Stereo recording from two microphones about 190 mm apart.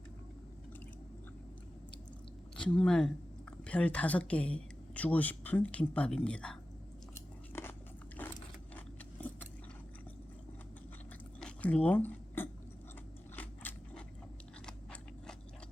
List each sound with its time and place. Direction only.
2.6 s speech: 5° left (ahead or behind)
7.5 s biting: 10° left (ahead or behind)
8.7 s a sound: 10° left (ahead or behind)
11.3 s a sound: 5° left (ahead or behind)
13.3 s biting: 10° left (ahead or behind)
14.7 s chewing: 5° left (ahead or behind)